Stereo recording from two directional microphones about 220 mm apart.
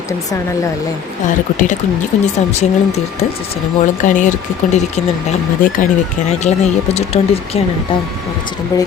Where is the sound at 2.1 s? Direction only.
30° left (ahead or behind).